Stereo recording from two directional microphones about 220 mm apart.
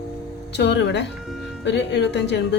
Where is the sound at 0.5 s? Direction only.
50° left (ahead or behind).